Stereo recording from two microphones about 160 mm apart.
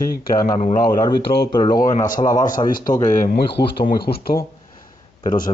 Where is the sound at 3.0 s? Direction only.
55° left (ahead or behind).